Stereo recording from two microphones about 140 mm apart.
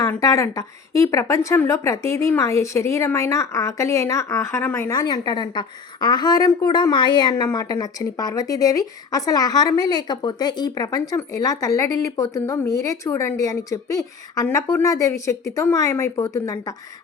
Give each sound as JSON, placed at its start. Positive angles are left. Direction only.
{"t": 0.1, "sound": "a woman's voice", "side_deg": 25}